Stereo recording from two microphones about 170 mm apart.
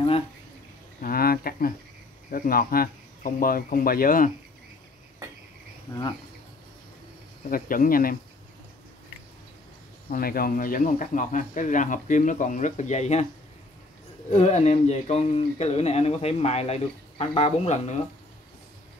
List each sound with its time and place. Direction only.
1.0 s a sound: 60° left (ahead or behind)
2.3 s speech: 55° left (ahead or behind)
7.4 s speech: 55° left (ahead or behind)
10.0 s speech: 60° left (ahead or behind); by 13.3 s 40° left (ahead or behind)
14.3 s speech: 40° left (ahead or behind)